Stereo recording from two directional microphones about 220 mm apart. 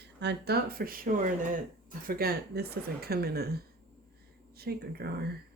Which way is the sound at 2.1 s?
45° right (ahead or behind).